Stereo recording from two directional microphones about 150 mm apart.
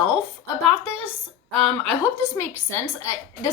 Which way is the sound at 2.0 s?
15° left (ahead or behind).